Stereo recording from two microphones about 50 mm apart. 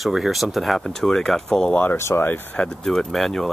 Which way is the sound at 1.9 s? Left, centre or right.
Left.